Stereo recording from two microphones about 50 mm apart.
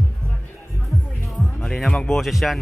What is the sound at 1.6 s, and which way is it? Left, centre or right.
Speech, centre.